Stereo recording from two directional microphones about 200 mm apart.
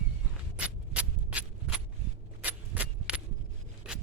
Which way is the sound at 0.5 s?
5° right (ahead or behind).